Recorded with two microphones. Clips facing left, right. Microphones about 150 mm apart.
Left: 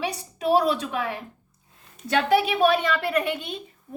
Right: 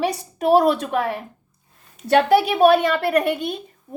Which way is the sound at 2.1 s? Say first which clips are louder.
Right 5 dB; 50° right (ahead or behind).